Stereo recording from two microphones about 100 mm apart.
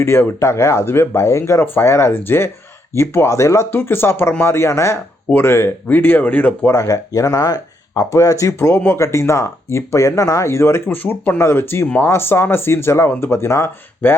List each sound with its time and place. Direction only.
0.0 s speech: 25° left (ahead or behind)
6.7 s speech: 35° left (ahead or behind)